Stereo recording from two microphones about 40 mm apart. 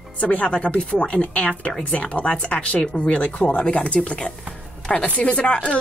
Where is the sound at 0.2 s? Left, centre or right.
Left.